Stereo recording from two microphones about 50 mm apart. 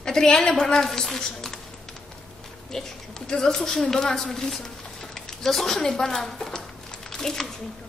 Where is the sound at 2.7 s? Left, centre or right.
Centre.